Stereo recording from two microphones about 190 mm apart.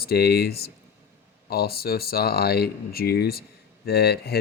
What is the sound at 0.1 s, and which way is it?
Speech, 60° left (ahead or behind).